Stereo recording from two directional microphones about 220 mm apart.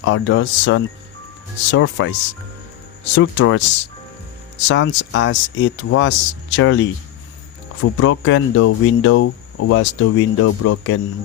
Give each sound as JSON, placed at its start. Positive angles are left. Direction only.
{"t": 0.0, "sound": "speech", "side_deg": 60}
{"t": 7.9, "sound": "speech", "side_deg": 60}